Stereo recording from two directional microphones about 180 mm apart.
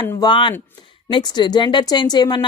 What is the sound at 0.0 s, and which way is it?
Speech, 25° left (ahead or behind).